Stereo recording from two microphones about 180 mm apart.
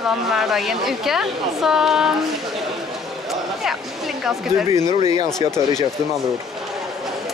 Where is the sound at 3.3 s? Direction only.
Centre (ahead or behind).